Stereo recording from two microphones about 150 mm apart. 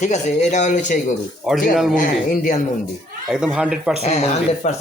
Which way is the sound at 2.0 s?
65° left (ahead or behind).